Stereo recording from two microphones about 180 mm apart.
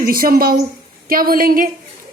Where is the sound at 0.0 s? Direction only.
55° right (ahead or behind).